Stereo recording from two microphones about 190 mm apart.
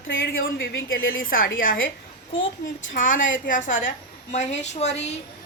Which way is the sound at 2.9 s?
45° left (ahead or behind).